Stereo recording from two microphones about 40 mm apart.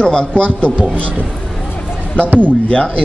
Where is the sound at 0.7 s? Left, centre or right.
Right.